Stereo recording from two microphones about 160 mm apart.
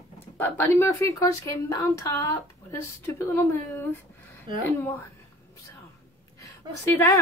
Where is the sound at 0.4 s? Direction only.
15° left (ahead or behind).